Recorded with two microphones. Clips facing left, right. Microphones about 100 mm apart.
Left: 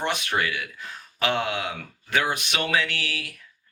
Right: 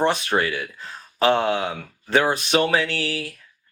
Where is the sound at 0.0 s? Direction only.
35° right (ahead or behind).